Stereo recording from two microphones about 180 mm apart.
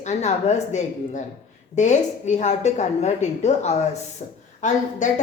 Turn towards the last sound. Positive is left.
turn(degrees=45)  # may be behind; listen again after turning